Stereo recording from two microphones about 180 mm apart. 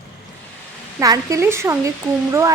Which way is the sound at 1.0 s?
20° right (ahead or behind).